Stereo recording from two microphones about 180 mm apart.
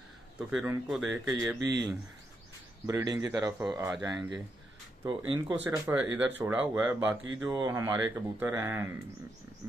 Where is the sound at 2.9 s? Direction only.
15° right (ahead or behind).